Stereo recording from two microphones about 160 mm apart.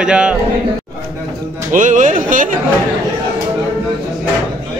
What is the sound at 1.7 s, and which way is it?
Speech, 55° right (ahead or behind).